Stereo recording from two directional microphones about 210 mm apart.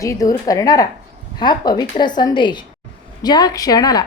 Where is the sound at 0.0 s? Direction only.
15° left (ahead or behind).